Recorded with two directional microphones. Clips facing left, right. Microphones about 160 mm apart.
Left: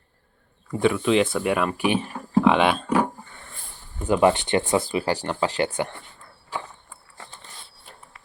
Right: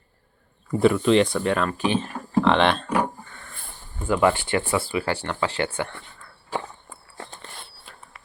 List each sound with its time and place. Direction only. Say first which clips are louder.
0.7 s speech: right 2 dB; centre (ahead or behind)
4.0 s speech: left 2 dB; 20° left (ahead or behind)
7.2 s a sound: right 5 dB; 65° right (ahead or behind)